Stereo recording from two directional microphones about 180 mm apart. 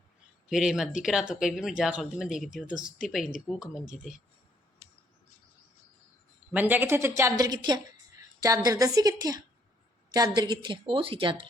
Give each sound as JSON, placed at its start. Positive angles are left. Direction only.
{"t": 0.5, "sound": "speech", "side_deg": 0}
{"t": 6.5, "sound": "a woman's voice", "side_deg": -10}